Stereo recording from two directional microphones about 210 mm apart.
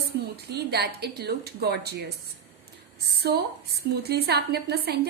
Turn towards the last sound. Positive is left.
turn(degrees=-50)  # may be behind; listen again after turning